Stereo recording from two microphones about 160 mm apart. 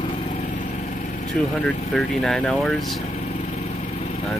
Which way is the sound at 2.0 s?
5° left (ahead or behind).